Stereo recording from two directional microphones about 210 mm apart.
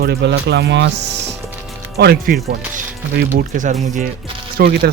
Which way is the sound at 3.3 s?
35° right (ahead or behind).